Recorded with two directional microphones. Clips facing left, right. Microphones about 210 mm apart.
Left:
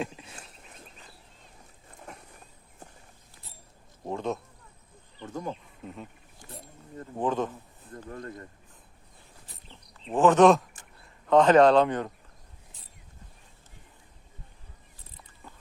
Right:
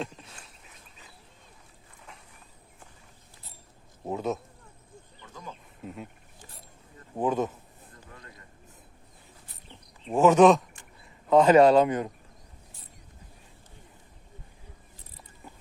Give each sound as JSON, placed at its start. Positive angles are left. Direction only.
{"t": 4.0, "sound": "speech", "side_deg": -5}
{"t": 5.2, "sound": "speech", "side_deg": 50}
{"t": 5.8, "sound": "speech", "side_deg": -5}
{"t": 7.2, "sound": "speech", "side_deg": -10}
{"t": 7.9, "sound": "speech", "side_deg": 50}
{"t": 10.1, "sound": "speech", "side_deg": -10}